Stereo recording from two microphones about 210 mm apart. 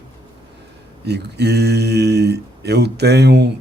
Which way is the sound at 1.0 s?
50° right (ahead or behind).